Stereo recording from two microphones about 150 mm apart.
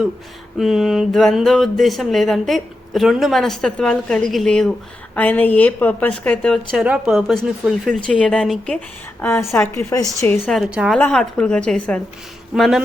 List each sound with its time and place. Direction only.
0.6 s a woman's voice: centre (ahead or behind)
9.2 s a woman's voice: 15° left (ahead or behind)
10.4 s speech: 5° right (ahead or behind)
11.0 s a woman's voice: 10° left (ahead or behind)